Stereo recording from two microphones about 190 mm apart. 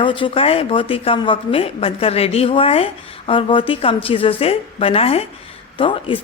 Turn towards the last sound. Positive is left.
turn(degrees=30)  # may be behind; listen again after turning